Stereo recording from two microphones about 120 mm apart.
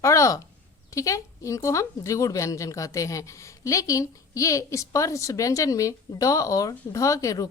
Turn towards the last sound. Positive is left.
turn(degrees=30)  # may be behind; listen again after turning